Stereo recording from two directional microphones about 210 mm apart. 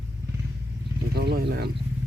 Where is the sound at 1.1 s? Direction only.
50° right (ahead or behind).